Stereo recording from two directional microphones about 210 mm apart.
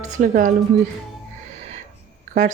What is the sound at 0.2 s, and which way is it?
Speech, 40° right (ahead or behind).